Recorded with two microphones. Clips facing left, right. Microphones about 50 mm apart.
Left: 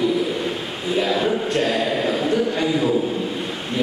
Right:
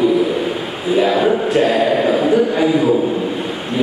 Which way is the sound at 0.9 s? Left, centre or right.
Centre.